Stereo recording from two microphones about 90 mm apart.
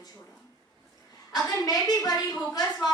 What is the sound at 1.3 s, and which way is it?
Speech, 45° left (ahead or behind).